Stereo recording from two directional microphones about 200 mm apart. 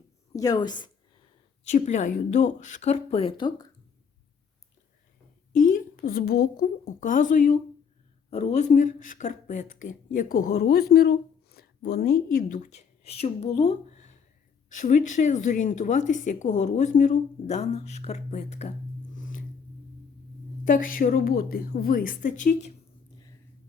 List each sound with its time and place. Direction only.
0.3 s a woman's voice: 20° left (ahead or behind)
1.6 s speech: 35° left (ahead or behind)
5.5 s a woman's voice: 40° left (ahead or behind)
19.1 s squish: 40° left (ahead or behind)
20.7 s a woman's voice: 40° left (ahead or behind)